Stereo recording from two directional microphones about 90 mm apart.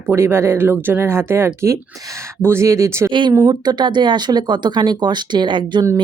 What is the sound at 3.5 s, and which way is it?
Speech, 55° right (ahead or behind).